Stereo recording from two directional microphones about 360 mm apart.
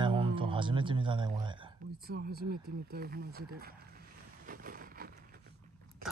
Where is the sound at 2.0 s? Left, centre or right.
Right.